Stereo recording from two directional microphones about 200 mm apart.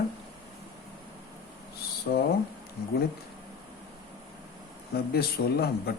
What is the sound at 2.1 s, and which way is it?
Speech, 55° left (ahead or behind).